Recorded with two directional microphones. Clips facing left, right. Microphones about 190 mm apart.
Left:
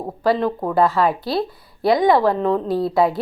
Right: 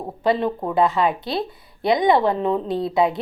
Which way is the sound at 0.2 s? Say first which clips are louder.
Left 1 dB; 20° right (ahead or behind).